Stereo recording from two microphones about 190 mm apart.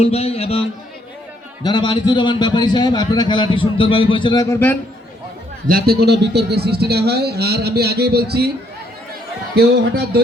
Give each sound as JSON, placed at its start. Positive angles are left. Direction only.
{"t": 0.0, "sound": "a man's voice", "side_deg": 35}
{"t": 5.6, "sound": "a man's voice", "side_deg": -50}
{"t": 9.6, "sound": "a man's voice", "side_deg": -55}